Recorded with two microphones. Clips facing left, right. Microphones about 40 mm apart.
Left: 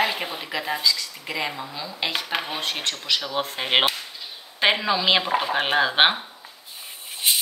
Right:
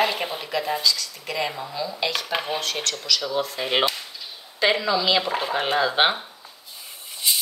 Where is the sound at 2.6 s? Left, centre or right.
Left.